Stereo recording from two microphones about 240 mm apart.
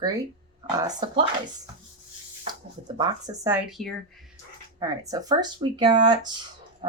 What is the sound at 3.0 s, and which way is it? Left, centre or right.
Speech, centre.